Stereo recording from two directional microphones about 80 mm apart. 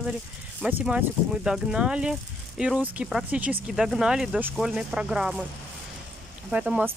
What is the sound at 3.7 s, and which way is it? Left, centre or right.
Speech, centre.